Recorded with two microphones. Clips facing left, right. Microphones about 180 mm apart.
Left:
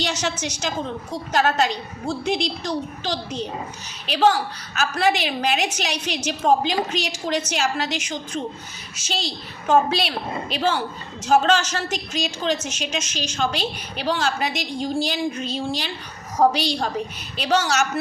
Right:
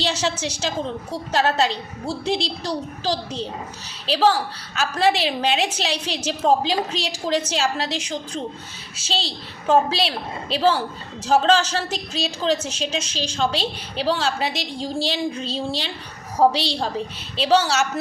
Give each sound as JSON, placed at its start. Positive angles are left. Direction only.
{"t": 0.0, "sound": "a woman's voice", "side_deg": -30}